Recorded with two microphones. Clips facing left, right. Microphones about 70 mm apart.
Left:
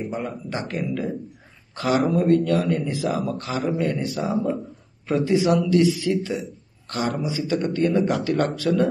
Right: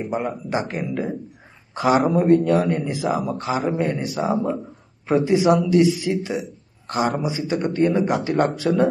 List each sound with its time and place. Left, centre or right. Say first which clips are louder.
0.1 s speech: right 5 dB; centre